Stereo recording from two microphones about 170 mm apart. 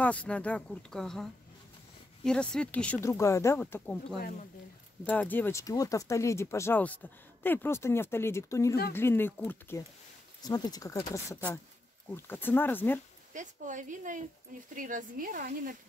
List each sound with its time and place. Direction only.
0.0 s speech: 10° left (ahead or behind)
13.3 s speech: 45° right (ahead or behind)